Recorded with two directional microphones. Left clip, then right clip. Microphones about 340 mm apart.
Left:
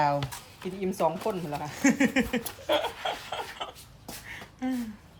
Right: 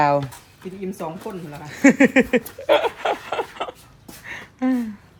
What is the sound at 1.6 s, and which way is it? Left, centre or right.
Speech, left.